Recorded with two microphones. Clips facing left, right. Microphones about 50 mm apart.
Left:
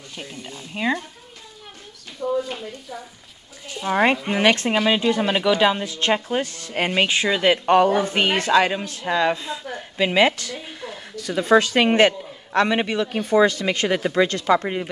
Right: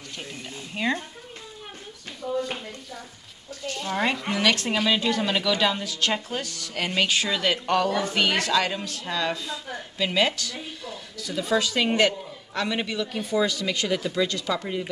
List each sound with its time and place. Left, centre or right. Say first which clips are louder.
0.7 s speech: left 3 dB; centre
2.2 s speech: left 6 dB; left
3.6 s speech: left 5 dB; centre
4.3 s a woman's voice: left 5 dB; left